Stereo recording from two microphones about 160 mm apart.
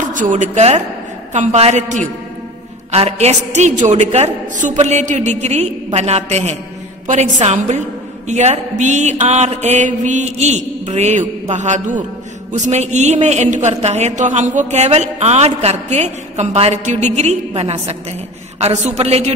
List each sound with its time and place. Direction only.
0.1 s a woman's voice: 55° right (ahead or behind)